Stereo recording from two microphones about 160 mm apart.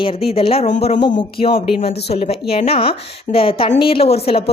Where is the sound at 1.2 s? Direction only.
35° left (ahead or behind).